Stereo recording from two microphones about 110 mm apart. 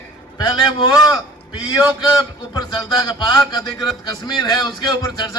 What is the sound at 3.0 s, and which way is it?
A man's voice, 40° left (ahead or behind).